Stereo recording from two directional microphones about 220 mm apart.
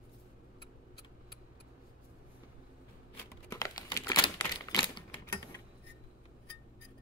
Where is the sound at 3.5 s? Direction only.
15° left (ahead or behind).